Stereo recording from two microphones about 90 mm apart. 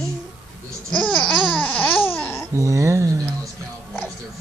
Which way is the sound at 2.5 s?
35° right (ahead or behind).